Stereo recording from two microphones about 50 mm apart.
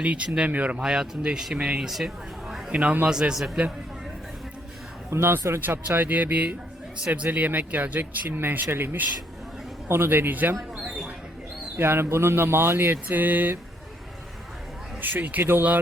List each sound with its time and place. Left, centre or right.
0.0 s speech: right
0.8 s speech: centre
2.7 s speech: right
3.1 s speech: centre
5.1 s a man's voice: right
5.9 s a man's voice: right
10.8 s mouse: centre
11.8 s a man's voice: right
12.0 s a man's voice: right
13.1 s speech: right
15.0 s speech: right